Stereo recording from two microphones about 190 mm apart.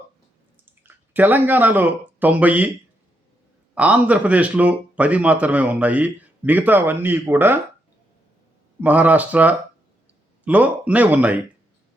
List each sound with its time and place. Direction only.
0.6 s speech: 10° right (ahead or behind)
3.8 s speech: 5° right (ahead or behind)
8.8 s speech: 10° right (ahead or behind)